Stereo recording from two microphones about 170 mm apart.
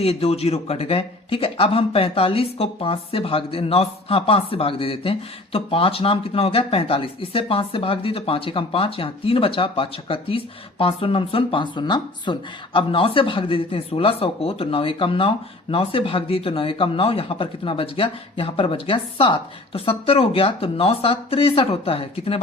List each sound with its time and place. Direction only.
0.0 s speech: 35° left (ahead or behind)